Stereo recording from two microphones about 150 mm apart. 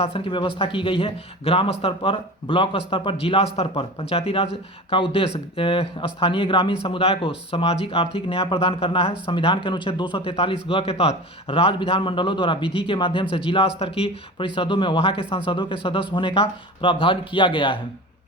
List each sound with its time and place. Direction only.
0.0 s a man's voice: 35° left (ahead or behind)
12.6 s speech: 5° right (ahead or behind)
12.9 s a man's voice: 35° left (ahead or behind)